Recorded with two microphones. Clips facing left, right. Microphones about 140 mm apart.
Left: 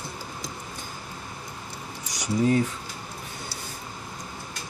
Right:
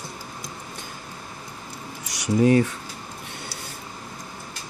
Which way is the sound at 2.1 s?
70° right (ahead or behind).